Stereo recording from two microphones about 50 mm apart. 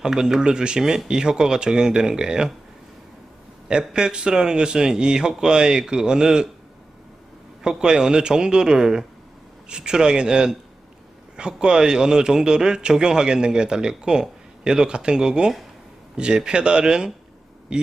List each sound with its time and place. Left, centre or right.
0.0 s a man's voice: centre
3.7 s a man's voice: centre
7.6 s a man's voice: centre